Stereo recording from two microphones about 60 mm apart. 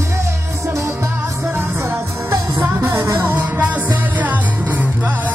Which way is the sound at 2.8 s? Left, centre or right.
Right.